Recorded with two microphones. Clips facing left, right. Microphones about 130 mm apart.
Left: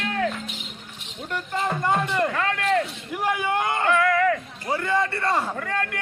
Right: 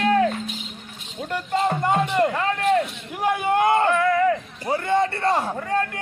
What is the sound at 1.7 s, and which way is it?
A man's voice, 20° right (ahead or behind).